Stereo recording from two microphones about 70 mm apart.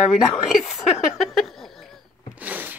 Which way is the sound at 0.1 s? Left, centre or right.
Centre.